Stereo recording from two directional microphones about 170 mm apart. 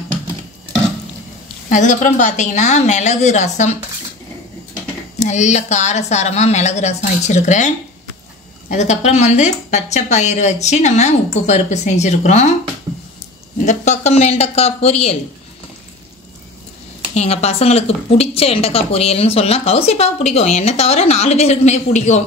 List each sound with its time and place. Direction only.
1.7 s a woman's voice: 45° left (ahead or behind)
5.2 s a woman's voice: 45° left (ahead or behind)
13.7 s a woman's voice: 40° left (ahead or behind)
17.1 s a woman's voice: 40° left (ahead or behind)